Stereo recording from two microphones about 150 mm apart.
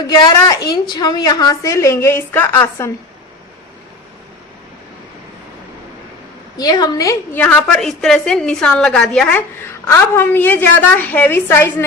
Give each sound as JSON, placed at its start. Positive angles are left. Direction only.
{"t": 0.1, "sound": "a woman's voice", "side_deg": 30}
{"t": 6.6, "sound": "a woman's voice", "side_deg": 25}
{"t": 7.3, "sound": "a woman's voice", "side_deg": 10}